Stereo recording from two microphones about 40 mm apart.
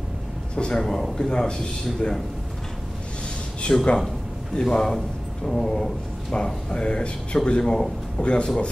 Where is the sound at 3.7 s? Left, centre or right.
Left.